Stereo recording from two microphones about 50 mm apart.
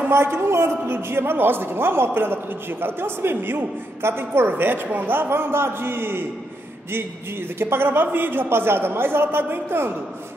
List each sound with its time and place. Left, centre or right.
0.1 s a woman's voice: right
7.5 s a woman's voice: right